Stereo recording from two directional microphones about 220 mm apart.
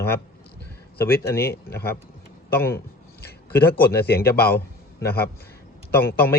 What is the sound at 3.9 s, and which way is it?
Speech, 45° left (ahead or behind).